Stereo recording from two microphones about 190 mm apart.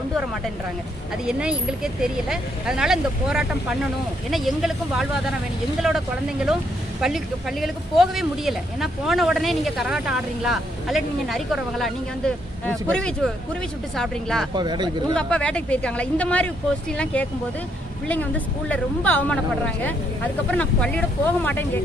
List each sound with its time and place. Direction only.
1.2 s speech: 5° right (ahead or behind)
14.5 s speech: 25° right (ahead or behind)
15.1 s speech: 5° left (ahead or behind)